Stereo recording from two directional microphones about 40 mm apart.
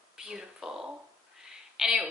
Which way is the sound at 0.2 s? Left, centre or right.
Centre.